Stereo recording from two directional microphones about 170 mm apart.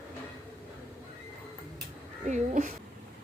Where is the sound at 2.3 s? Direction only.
45° right (ahead or behind).